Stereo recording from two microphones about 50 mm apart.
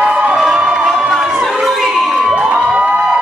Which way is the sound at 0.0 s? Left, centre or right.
Centre.